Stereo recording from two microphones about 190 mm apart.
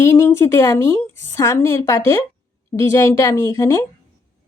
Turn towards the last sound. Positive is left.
turn(degrees=15)  # may be behind; listen again after turning